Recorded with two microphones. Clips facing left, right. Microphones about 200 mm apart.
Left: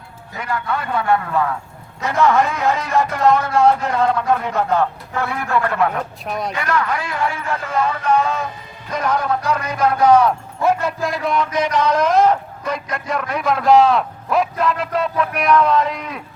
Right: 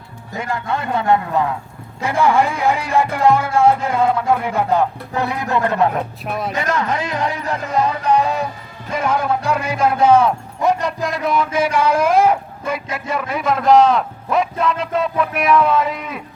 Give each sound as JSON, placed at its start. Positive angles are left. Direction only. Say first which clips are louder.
{"t": 0.3, "sound": "a man's voice", "louder": "right 1 dB", "side_deg": -25}
{"t": 6.2, "sound": "speech", "louder": "left 1 dB", "side_deg": -5}
{"t": 6.6, "sound": "a man's voice", "louder": "right 1 dB", "side_deg": -20}
{"t": 10.0, "sound": "a man's voice", "louder": "even", "side_deg": -25}
{"t": 10.8, "sound": "speech", "louder": "even", "side_deg": 0}